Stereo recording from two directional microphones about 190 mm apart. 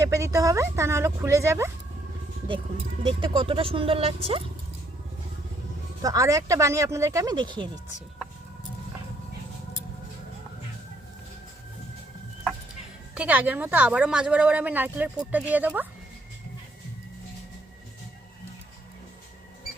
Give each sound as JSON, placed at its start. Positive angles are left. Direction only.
{"t": 0.0, "sound": "speech", "side_deg": -15}
{"t": 3.0, "sound": "speech", "side_deg": -25}
{"t": 6.0, "sound": "speech", "side_deg": -20}
{"t": 13.1, "sound": "speech", "side_deg": -10}